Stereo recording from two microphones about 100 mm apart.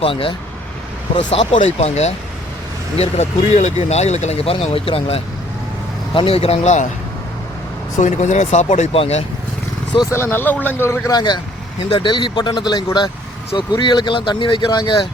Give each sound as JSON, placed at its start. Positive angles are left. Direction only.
{"t": 0.0, "sound": "speech", "side_deg": 65}
{"t": 1.1, "sound": "speech", "side_deg": 80}
{"t": 8.4, "sound": "speech", "side_deg": 80}
{"t": 10.1, "sound": "speech", "side_deg": 25}
{"t": 11.1, "sound": "speech", "side_deg": 45}
{"t": 11.9, "sound": "speech", "side_deg": 55}